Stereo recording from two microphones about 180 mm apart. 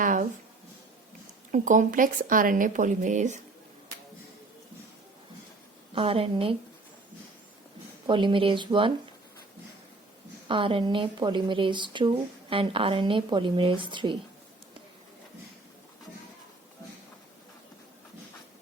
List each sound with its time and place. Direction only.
0.0 s a sound: 50° right (ahead or behind)
1.5 s speech: 45° right (ahead or behind)
5.9 s a woman's voice: 30° right (ahead or behind)
8.0 s speech: 25° right (ahead or behind)
10.5 s speech: 30° right (ahead or behind)